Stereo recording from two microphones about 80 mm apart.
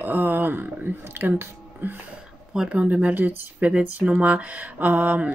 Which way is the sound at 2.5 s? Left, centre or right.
Centre.